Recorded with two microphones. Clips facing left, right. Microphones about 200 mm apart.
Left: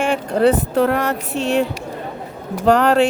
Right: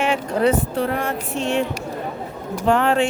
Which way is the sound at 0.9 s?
70° left (ahead or behind).